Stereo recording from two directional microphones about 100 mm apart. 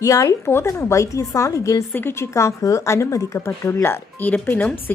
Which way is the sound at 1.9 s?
20° left (ahead or behind).